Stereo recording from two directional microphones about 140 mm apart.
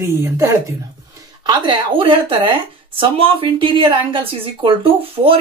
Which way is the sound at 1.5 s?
30° right (ahead or behind).